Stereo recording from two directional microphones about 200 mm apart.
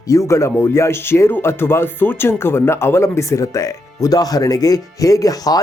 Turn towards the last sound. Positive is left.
turn(degrees=20)  # may be behind; listen again after turning